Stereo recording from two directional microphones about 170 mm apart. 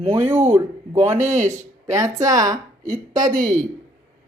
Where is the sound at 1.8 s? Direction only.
20° right (ahead or behind).